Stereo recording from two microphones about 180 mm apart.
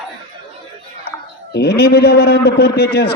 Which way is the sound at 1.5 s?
65° left (ahead or behind).